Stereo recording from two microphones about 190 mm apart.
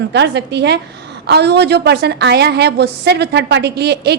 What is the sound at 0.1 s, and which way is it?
A woman's voice, 65° right (ahead or behind).